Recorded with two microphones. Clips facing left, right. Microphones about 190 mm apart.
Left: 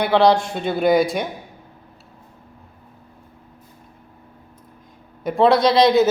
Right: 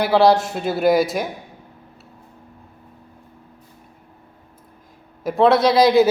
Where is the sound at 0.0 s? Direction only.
5° right (ahead or behind).